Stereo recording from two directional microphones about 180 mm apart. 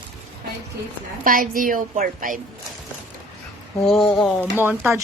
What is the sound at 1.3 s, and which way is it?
A woman's voice, 50° right (ahead or behind).